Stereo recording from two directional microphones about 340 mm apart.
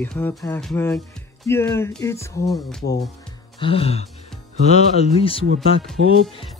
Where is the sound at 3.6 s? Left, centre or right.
Centre.